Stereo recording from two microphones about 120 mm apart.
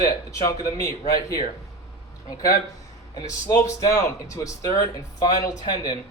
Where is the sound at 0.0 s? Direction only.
25° left (ahead or behind).